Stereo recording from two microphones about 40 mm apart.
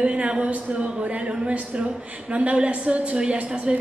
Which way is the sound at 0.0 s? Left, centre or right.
Right.